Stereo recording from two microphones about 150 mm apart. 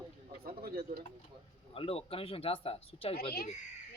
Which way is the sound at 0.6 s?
90° right.